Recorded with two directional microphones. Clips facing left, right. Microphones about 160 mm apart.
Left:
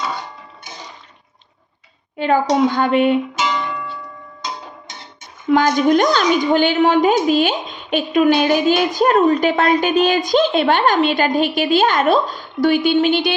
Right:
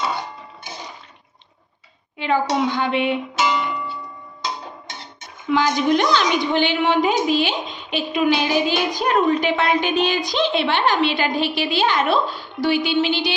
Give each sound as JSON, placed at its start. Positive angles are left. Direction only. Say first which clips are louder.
{"t": 2.1, "sound": "a woman's voice", "louder": "left 4 dB", "side_deg": 45}
{"t": 5.5, "sound": "a woman's voice", "louder": "left 4 dB", "side_deg": 45}